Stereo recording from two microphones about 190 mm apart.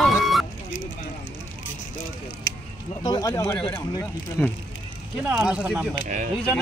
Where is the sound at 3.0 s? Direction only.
20° left (ahead or behind).